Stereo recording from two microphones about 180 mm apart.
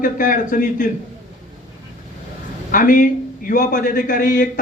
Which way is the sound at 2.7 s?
50° left (ahead or behind).